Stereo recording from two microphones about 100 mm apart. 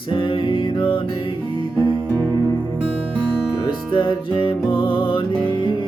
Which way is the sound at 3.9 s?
55° left (ahead or behind).